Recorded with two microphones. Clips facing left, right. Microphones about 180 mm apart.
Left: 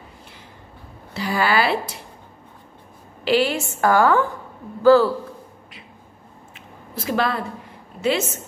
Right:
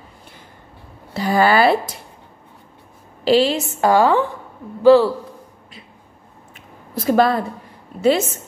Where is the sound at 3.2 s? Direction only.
30° right (ahead or behind).